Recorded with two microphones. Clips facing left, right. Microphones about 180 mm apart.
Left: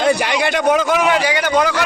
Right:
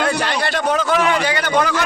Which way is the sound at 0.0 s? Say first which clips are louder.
Left 4 dB; 15° left (ahead or behind).